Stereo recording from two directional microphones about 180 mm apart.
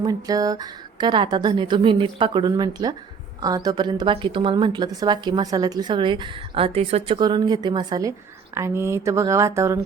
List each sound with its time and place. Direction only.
0.0 s a woman's voice: 20° right (ahead or behind)
7.2 s a woman's voice: 25° right (ahead or behind)